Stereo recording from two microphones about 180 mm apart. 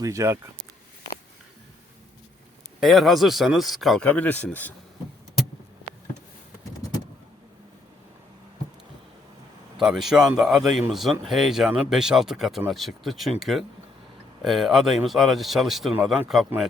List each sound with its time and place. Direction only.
0.0 s speech: 15° right (ahead or behind)
2.8 s speech: centre (ahead or behind)
9.7 s speech: centre (ahead or behind)